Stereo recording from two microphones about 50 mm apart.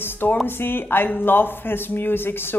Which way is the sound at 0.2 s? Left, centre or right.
Left.